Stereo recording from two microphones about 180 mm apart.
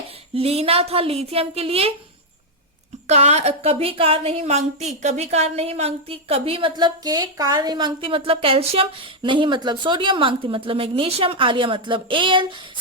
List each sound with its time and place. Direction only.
0.3 s a woman's voice: 35° right (ahead or behind)
3.1 s a woman's voice: 35° right (ahead or behind)